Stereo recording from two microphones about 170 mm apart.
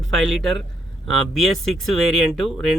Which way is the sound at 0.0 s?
Centre (ahead or behind).